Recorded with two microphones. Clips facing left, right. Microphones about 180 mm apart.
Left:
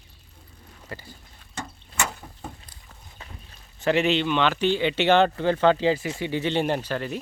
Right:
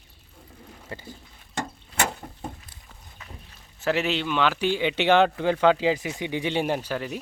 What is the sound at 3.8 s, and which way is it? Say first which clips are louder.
Speech: left 3 dB; 5° right (ahead or behind).